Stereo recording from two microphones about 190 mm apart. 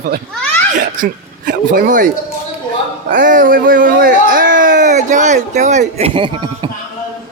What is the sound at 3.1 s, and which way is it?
Speech, 45° right (ahead or behind).